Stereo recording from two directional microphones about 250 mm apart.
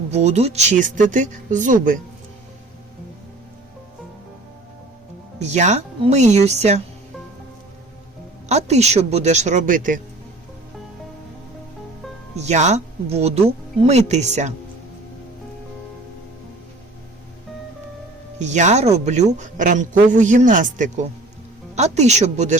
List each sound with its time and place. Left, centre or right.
0.1 s speech: right
5.4 s speech: right
8.4 s speech: right
12.4 s speech: right
18.3 s speech: right